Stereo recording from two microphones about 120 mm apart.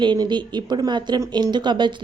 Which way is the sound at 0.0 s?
40° right (ahead or behind).